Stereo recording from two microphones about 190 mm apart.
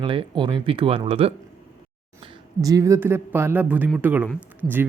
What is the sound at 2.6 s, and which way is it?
Speech, 20° right (ahead or behind).